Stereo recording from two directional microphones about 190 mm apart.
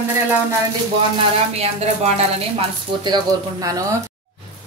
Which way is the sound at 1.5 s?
35° right (ahead or behind).